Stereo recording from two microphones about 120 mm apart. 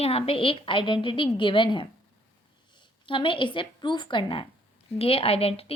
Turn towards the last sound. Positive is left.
turn(degrees=55)  # may be behind; listen again after turning